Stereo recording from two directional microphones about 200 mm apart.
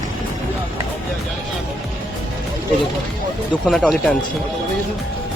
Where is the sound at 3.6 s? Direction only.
Centre (ahead or behind).